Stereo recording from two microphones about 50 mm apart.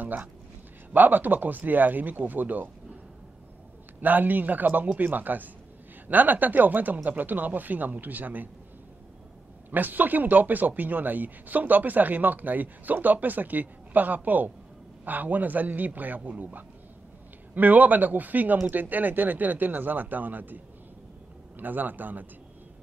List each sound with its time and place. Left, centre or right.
0.0 s speech: right
4.0 s speech: right
9.7 s speech: right
17.6 s speech: right